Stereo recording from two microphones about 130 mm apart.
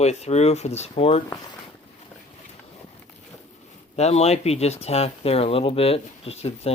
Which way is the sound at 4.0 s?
55° left (ahead or behind).